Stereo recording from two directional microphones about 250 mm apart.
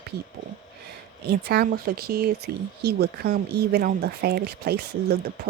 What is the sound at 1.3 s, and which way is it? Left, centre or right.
Speech, right.